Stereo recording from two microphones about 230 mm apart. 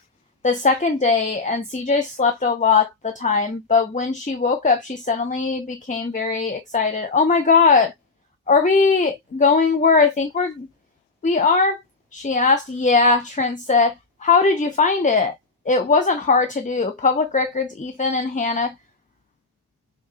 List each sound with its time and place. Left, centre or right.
0.4 s a woman's voice: left